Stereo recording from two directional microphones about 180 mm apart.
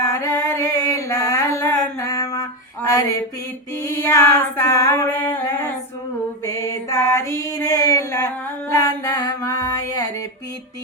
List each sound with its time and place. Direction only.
0.0 s a sound: 20° left (ahead or behind)
3.8 s singing: 15° left (ahead or behind)
8.7 s music: 20° left (ahead or behind)